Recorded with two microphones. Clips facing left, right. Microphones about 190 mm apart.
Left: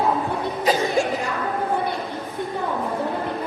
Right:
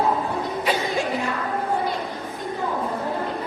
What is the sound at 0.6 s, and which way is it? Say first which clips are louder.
Music: left 5 dB; 40° left (ahead or behind).